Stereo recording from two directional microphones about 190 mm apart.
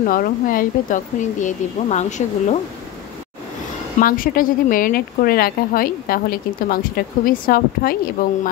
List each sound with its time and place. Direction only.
0.0 s speech: 50° left (ahead or behind)
4.0 s a woman's voice: 45° left (ahead or behind)